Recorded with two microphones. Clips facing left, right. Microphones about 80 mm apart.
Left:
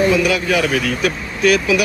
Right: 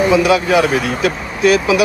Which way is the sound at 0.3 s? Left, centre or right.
Right.